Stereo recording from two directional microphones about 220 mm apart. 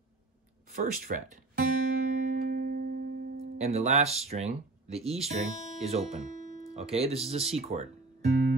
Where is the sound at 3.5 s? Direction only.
30° right (ahead or behind).